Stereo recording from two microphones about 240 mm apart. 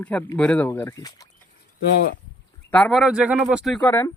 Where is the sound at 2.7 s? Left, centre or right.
Centre.